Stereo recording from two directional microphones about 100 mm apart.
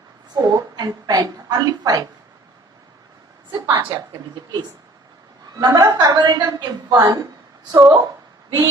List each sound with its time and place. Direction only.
0.3 s a woman's voice: 40° right (ahead or behind)
3.5 s a woman's voice: 40° right (ahead or behind)
5.5 s a woman's voice: 40° right (ahead or behind)